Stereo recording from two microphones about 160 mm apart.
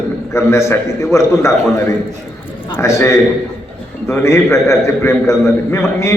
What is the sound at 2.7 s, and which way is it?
A man's voice, 15° left (ahead or behind).